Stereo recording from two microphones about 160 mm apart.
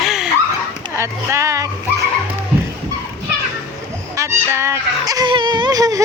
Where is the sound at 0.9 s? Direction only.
15° right (ahead or behind).